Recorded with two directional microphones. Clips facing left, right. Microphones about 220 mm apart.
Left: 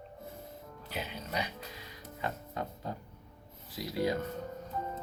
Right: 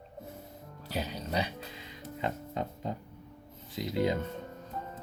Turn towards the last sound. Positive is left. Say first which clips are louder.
# right 2 dB
turn(degrees=-20)  # may be behind; listen again after turning